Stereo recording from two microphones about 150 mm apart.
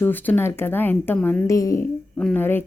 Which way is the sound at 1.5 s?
20° left (ahead or behind).